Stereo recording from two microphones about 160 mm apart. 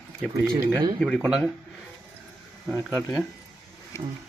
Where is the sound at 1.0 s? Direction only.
Centre (ahead or behind).